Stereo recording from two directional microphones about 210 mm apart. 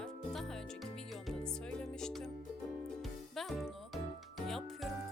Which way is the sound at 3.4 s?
Centre (ahead or behind).